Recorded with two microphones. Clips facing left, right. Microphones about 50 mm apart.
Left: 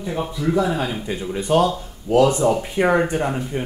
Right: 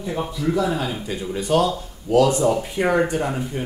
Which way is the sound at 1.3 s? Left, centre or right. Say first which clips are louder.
Left 2 dB; left.